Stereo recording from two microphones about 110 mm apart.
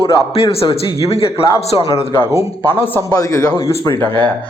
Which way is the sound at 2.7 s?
20° left (ahead or behind).